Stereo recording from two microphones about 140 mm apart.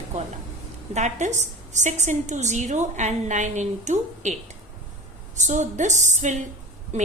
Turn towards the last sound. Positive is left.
turn(degrees=-55)  # may be behind; listen again after turning